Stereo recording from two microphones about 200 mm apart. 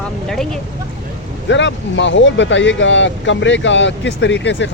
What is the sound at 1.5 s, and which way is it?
Speech, 65° left (ahead or behind).